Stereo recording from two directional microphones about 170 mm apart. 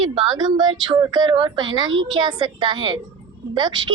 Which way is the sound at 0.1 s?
25° right (ahead or behind).